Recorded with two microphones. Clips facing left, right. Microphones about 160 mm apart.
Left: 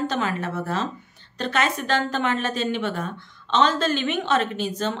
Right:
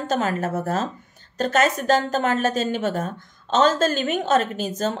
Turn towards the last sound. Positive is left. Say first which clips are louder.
# right 1 dB
turn(degrees=-40)  # may be behind; listen again after turning